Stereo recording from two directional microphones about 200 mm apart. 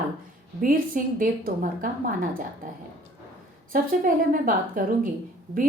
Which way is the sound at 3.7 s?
45° right (ahead or behind).